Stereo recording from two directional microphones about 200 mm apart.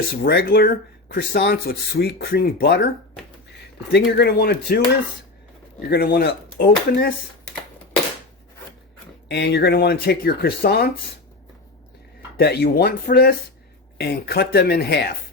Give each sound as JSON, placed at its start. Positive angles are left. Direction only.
{"t": 0.2, "sound": "speech", "side_deg": 50}
{"t": 3.9, "sound": "speech", "side_deg": 55}
{"t": 5.9, "sound": "speech", "side_deg": 50}
{"t": 9.3, "sound": "speech", "side_deg": 55}
{"t": 12.4, "sound": "speech", "side_deg": 50}